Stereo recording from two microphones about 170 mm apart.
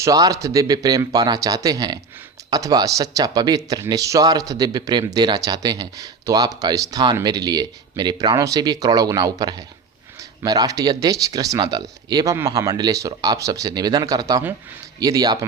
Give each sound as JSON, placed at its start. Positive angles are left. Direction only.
{"t": 0.0, "sound": "speech", "side_deg": -20}